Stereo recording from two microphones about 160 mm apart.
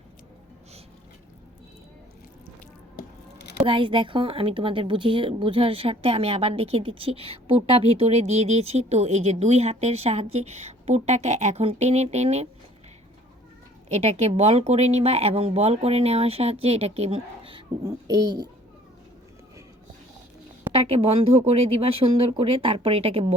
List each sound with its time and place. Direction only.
3.6 s a woman's voice: 30° right (ahead or behind)
13.9 s a woman's voice: 40° right (ahead or behind)
17.8 s a child's voice: 25° right (ahead or behind)
20.7 s a woman's voice: 35° right (ahead or behind)